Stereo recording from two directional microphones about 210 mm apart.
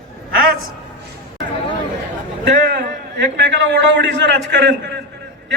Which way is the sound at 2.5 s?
45° right (ahead or behind).